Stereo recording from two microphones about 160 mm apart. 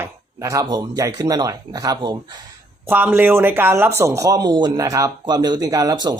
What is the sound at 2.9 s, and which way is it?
Speech, 10° right (ahead or behind).